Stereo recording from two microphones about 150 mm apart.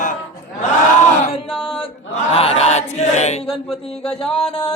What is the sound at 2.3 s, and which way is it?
Chant, 40° left (ahead or behind).